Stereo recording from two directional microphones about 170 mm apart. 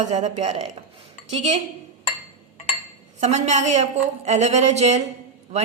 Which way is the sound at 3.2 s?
45° right (ahead or behind).